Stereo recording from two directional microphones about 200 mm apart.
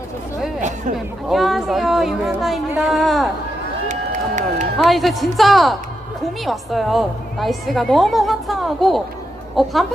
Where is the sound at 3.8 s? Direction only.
35° right (ahead or behind).